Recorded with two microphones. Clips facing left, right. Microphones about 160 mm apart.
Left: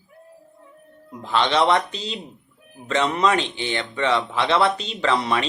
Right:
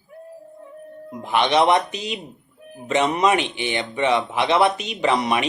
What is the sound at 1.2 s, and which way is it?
Speech, 15° right (ahead or behind).